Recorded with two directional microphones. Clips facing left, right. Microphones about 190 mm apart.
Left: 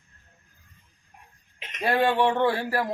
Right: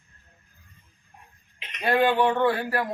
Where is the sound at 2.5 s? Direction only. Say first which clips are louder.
Even; 30° left (ahead or behind).